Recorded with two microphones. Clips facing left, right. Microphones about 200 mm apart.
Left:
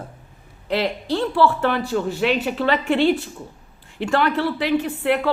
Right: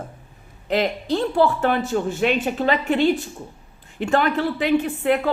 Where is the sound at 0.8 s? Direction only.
45° right (ahead or behind).